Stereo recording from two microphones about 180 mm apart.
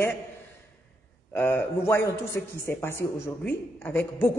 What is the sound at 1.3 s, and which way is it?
A woman's voice, 10° left (ahead or behind).